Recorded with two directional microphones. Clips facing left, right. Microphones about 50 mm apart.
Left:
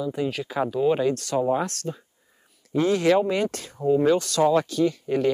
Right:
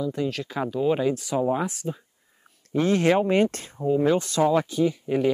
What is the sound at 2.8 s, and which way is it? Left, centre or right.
Speech, right.